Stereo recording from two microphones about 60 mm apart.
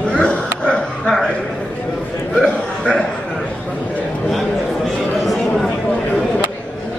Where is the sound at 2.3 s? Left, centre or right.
Centre.